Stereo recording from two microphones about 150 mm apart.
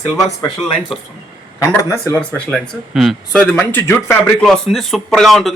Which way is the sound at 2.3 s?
Centre (ahead or behind).